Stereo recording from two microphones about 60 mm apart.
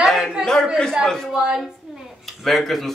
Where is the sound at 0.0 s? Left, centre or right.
Centre.